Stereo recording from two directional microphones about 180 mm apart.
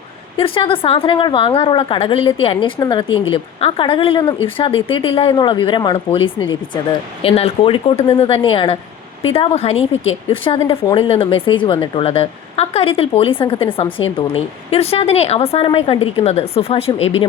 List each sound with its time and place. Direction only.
0.3 s a woman's voice: 30° left (ahead or behind)